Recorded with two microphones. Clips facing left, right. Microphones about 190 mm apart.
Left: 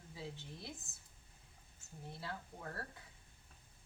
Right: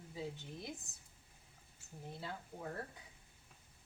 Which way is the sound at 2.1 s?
20° right (ahead or behind).